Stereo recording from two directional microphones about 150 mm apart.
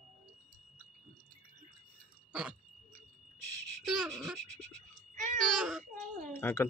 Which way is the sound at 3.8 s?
Centre (ahead or behind).